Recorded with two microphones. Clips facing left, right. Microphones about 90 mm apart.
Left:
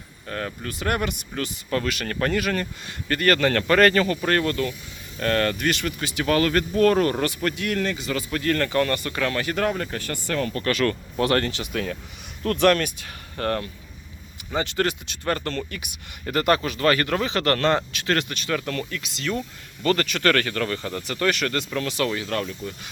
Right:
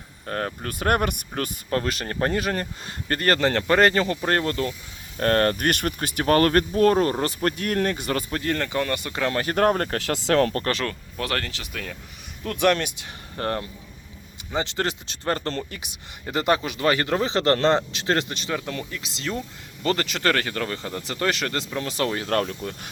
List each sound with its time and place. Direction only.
0.3 s speech: 40° right (ahead or behind)
1.7 s speech: 35° right (ahead or behind)
5.2 s speech: 40° right (ahead or behind)
6.7 s speech: 25° right (ahead or behind); by 8.2 s 50° right (ahead or behind)
8.3 s speech: 20° right (ahead or behind)
9.4 s speech: 40° right (ahead or behind)
10.0 s speech: 90° right; by 10.6 s 75° right (ahead or behind)
10.6 s speech: 30° right (ahead or behind)
11.2 s speech: 5° left (ahead or behind)
12.4 s speech: 10° right (ahead or behind)
21.9 s speech: 35° right (ahead or behind); by 22.9 s 55° right (ahead or behind)